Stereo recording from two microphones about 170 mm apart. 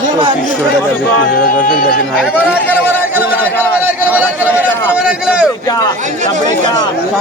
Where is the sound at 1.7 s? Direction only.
55° left (ahead or behind).